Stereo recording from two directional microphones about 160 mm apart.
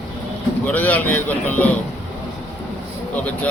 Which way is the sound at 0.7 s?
10° left (ahead or behind).